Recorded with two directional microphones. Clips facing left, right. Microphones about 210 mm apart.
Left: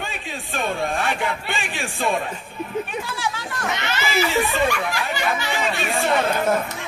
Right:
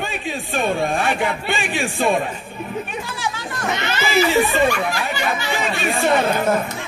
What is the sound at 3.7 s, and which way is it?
Speech, 30° right (ahead or behind).